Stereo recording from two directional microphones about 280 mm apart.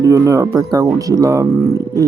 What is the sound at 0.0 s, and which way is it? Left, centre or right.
Speech, centre.